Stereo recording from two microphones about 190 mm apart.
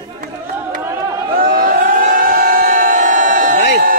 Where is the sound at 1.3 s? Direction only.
45° right (ahead or behind).